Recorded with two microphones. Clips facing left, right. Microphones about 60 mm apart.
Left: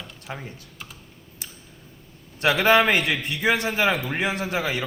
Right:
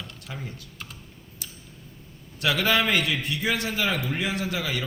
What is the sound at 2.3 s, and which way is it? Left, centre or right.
Speech, left.